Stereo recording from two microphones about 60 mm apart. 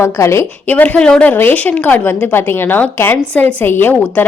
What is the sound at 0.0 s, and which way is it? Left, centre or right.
Speech, left.